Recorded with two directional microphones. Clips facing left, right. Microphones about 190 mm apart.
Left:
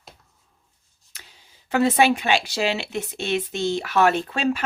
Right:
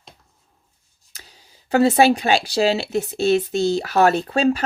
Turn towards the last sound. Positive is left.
turn(degrees=-35)  # may be behind; listen again after turning